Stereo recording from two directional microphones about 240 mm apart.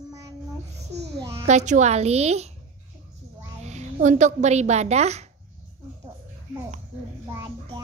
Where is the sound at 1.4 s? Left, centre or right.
Right.